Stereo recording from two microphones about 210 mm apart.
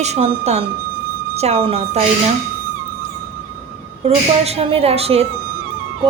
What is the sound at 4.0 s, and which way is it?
A woman's voice, 30° right (ahead or behind).